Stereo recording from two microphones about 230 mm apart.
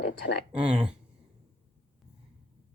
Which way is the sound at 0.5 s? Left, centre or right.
Centre.